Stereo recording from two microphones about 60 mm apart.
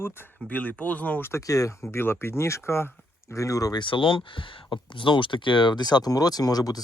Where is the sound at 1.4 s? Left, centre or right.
Left.